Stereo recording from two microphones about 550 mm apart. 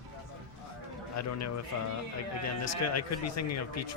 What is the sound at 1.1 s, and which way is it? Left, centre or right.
Speech, left.